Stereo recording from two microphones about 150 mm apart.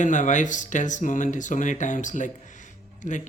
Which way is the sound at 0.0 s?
55° left (ahead or behind).